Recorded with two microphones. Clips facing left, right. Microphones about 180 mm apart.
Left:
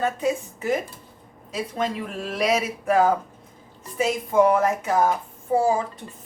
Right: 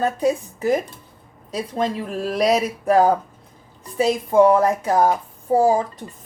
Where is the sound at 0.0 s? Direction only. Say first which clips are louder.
Right 4 dB; 40° right (ahead or behind).